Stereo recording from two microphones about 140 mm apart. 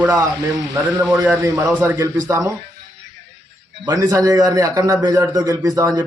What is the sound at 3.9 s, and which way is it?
A man's voice, 25° right (ahead or behind).